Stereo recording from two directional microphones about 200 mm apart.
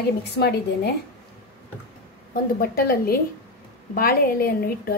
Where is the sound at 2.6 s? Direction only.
50° left (ahead or behind).